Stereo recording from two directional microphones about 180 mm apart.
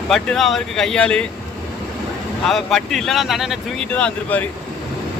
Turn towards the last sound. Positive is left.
turn(degrees=10)  # may be behind; listen again after turning